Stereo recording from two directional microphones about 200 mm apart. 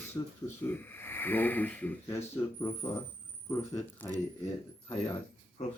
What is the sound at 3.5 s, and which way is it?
Speech, 15° left (ahead or behind).